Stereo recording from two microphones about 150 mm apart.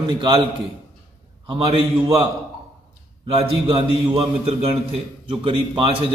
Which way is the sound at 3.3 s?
35° right (ahead or behind).